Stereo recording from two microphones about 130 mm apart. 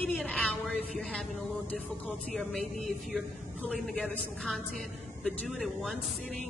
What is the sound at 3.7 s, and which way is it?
A man's voice, 10° left (ahead or behind).